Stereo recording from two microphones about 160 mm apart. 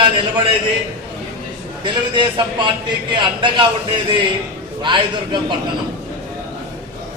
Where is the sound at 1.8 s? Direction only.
30° right (ahead or behind).